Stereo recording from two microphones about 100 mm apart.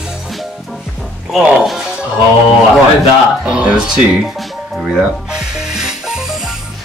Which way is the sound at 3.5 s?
10° right (ahead or behind).